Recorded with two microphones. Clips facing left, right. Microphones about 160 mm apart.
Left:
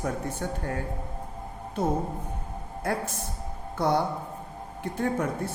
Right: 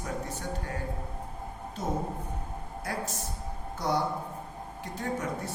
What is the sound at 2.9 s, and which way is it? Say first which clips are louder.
Speech: left 5 dB; 55° left (ahead or behind).